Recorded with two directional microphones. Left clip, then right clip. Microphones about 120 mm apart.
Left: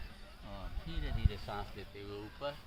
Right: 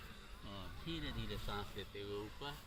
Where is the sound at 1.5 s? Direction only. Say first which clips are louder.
Left 3 dB; 15° left (ahead or behind).